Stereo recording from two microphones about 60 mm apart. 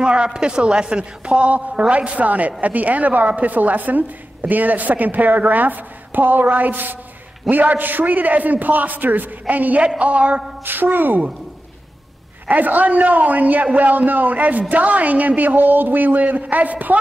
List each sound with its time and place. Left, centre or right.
0.0 s a man's voice: centre
10.6 s a woman's voice: right
12.4 s a man's voice: right